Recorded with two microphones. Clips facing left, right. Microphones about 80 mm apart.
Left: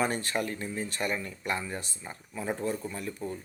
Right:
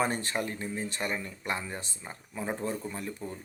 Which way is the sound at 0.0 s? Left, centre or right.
Right.